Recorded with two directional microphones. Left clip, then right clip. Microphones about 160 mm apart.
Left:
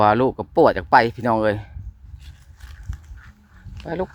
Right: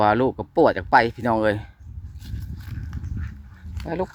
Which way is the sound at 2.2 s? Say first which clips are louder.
Right 6 dB; 20° right (ahead or behind).